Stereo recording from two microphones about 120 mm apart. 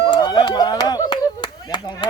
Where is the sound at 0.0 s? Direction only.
35° left (ahead or behind).